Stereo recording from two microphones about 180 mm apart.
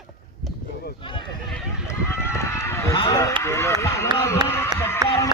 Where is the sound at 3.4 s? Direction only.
15° left (ahead or behind).